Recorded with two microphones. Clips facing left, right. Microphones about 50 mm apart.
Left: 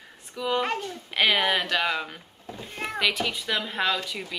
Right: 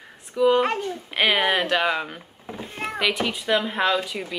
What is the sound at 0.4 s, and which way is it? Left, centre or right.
Speech, centre.